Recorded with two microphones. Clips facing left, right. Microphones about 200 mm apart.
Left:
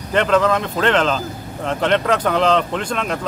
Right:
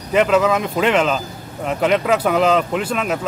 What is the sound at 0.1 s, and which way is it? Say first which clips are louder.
Speech: right 1 dB; 5° right (ahead or behind).